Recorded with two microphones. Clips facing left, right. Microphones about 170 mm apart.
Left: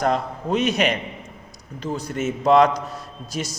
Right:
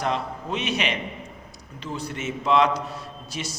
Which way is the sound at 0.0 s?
45° left (ahead or behind).